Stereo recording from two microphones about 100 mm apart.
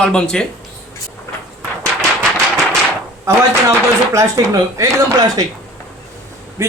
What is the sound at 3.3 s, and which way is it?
Speech, 30° right (ahead or behind).